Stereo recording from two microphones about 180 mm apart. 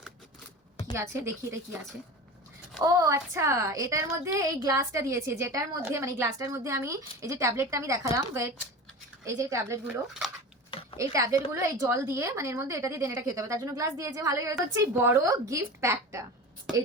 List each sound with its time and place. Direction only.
0.9 s a woman's voice: 15° right (ahead or behind)
2.8 s a woman's voice: 20° right (ahead or behind)
9.8 s speech: centre (ahead or behind)
10.9 s a woman's voice: 15° right (ahead or behind)